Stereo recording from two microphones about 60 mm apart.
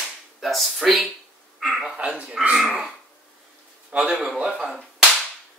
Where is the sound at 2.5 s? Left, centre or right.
Centre.